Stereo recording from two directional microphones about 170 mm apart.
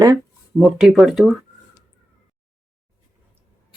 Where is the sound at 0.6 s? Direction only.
5° right (ahead or behind).